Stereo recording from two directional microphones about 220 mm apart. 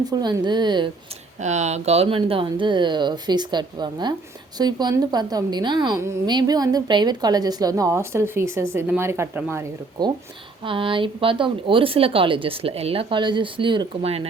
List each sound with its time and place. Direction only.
0.0 s speech: 20° right (ahead or behind)
1.4 s a woman's voice: 30° right (ahead or behind); by 10.1 s 10° right (ahead or behind)
10.6 s speech: 25° right (ahead or behind)